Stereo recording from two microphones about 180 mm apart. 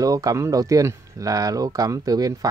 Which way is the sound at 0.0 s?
20° right (ahead or behind).